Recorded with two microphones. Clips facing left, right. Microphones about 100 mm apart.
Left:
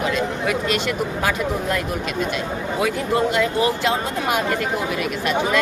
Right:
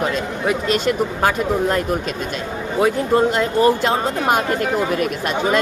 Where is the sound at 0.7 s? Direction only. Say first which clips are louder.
Right 4 dB; 45° right (ahead or behind).